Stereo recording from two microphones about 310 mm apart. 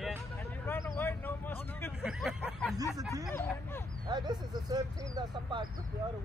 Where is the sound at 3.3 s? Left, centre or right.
Centre.